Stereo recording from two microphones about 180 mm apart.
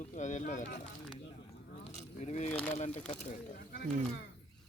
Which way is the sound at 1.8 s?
40° left (ahead or behind).